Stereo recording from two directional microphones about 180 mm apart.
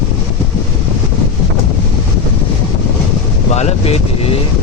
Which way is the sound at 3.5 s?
35° left (ahead or behind).